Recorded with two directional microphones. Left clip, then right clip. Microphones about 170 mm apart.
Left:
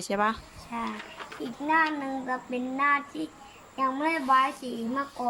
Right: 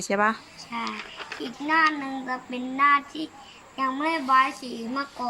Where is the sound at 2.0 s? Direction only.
Centre (ahead or behind).